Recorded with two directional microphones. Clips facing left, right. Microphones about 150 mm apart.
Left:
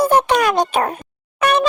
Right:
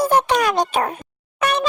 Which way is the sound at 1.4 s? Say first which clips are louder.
Left 4 dB; 60° left (ahead or behind).